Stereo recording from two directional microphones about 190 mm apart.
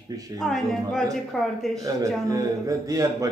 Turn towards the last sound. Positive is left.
turn(degrees=-20)  # may be behind; listen again after turning